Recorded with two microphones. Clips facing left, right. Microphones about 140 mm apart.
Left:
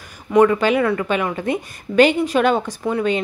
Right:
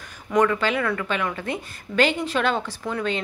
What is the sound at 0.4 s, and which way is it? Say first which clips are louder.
A woman's voice: left 7 dB; 20° left (ahead or behind).